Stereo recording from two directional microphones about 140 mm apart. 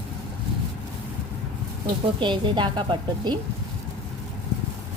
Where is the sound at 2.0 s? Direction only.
35° right (ahead or behind).